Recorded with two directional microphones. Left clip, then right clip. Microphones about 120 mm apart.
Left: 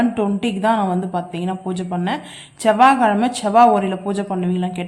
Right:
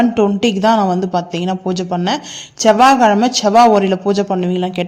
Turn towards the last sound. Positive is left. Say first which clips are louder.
# right 6 dB
turn(degrees=-55)  # may be behind; listen again after turning